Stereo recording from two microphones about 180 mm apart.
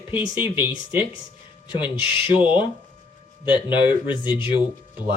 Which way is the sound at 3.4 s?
25° left (ahead or behind).